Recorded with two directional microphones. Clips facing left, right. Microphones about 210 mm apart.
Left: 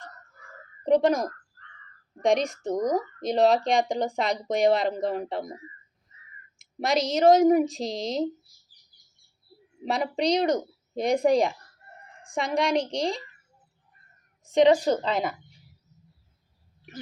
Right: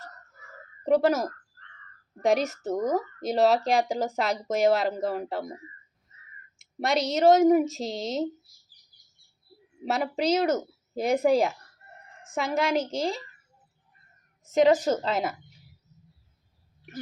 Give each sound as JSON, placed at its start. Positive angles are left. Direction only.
{"t": 0.9, "sound": "speech", "side_deg": -5}
{"t": 6.6, "sound": "speech", "side_deg": 0}
{"t": 9.8, "sound": "speech", "side_deg": -5}
{"t": 14.4, "sound": "speech", "side_deg": 0}